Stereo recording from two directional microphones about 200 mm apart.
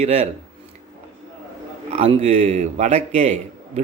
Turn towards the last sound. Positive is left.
turn(degrees=-35)  # may be behind; listen again after turning